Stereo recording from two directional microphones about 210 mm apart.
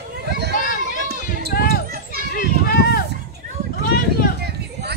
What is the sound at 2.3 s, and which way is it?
Run, 45° left (ahead or behind).